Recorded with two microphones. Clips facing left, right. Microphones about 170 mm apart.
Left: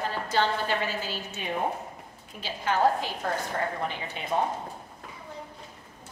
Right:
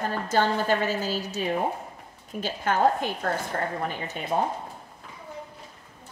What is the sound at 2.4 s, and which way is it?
A woman's voice, 50° right (ahead or behind).